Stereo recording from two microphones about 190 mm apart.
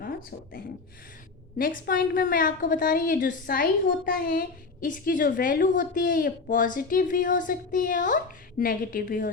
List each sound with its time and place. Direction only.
0.0 s a woman's voice: 50° left (ahead or behind)